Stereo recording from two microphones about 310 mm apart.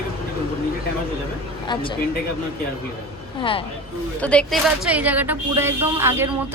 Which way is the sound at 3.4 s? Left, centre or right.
Centre.